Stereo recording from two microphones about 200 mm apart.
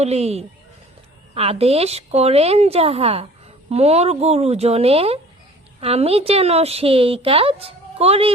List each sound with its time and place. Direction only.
0.0 s a woman's voice: 30° right (ahead or behind)